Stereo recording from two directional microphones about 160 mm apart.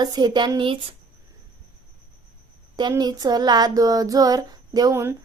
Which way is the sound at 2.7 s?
25° right (ahead or behind).